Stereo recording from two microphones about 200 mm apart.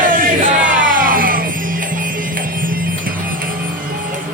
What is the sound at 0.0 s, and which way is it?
Music, 45° right (ahead or behind).